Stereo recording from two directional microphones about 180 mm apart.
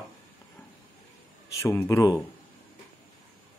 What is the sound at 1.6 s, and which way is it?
Speech, 15° left (ahead or behind).